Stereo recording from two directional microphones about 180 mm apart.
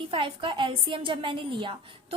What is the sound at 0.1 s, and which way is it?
A woman's voice, 30° right (ahead or behind).